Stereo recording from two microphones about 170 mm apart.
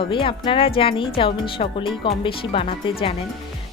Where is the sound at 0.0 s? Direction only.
30° left (ahead or behind).